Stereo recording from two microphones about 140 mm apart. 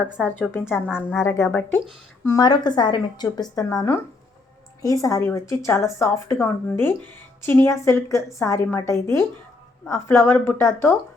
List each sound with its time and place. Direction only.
0.3 s a woman's voice: 15° left (ahead or behind)
0.9 s a woman's voice: 5° right (ahead or behind)
1.2 s a woman's voice: 20° left (ahead or behind)
2.2 s a woman's voice: 25° left (ahead or behind)